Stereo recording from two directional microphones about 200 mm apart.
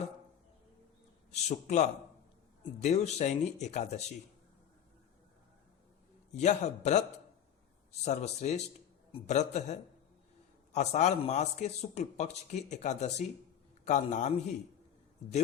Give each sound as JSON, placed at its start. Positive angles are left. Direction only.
{"t": 1.3, "sound": "a man's voice", "side_deg": 35}
{"t": 6.3, "sound": "speech", "side_deg": 35}
{"t": 8.0, "sound": "speech", "side_deg": 35}